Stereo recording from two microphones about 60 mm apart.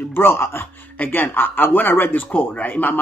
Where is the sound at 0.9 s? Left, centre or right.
Left.